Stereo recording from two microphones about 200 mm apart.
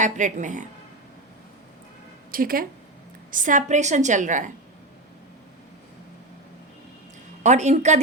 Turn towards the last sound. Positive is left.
turn(degrees=-35)  # may be behind; listen again after turning